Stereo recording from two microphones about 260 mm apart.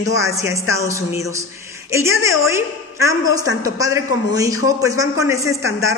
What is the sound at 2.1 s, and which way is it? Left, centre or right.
Speech, left.